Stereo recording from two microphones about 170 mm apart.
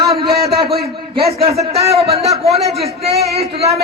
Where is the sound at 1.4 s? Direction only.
35° right (ahead or behind).